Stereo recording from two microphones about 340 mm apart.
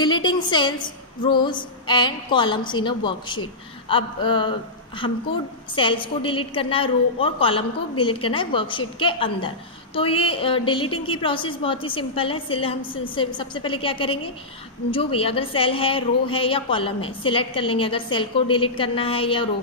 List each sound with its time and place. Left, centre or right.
0.0 s a woman's voice: centre